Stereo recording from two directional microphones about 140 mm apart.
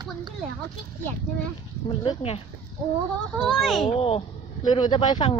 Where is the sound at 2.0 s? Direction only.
35° left (ahead or behind).